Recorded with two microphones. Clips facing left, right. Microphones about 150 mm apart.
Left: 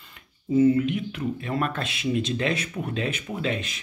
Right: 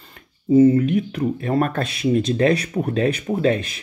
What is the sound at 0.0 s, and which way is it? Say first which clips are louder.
Speech: right 8 dB; 35° right (ahead or behind).